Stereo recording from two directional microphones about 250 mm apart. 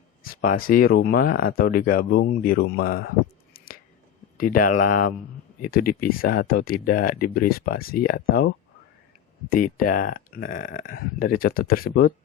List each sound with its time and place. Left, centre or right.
0.2 s speech: left
4.4 s speech: left